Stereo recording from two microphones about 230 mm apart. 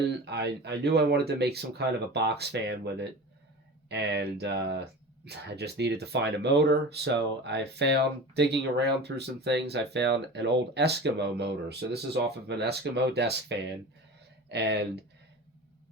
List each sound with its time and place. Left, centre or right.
0.3 s speech: right